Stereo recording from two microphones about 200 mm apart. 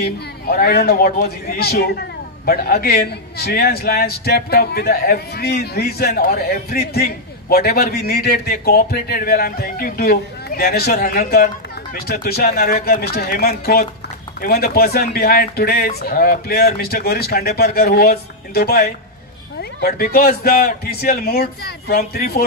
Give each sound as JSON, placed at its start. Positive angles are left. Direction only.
{"t": 0.0, "sound": "a man's voice", "side_deg": 50}